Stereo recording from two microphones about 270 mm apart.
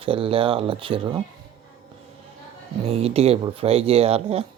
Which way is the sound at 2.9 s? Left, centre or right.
Right.